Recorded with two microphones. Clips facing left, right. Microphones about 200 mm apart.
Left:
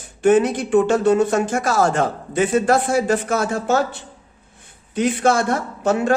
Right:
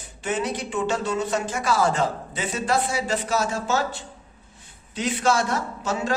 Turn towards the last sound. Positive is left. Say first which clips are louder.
# left 8 dB
turn(degrees=55)  # may be behind; listen again after turning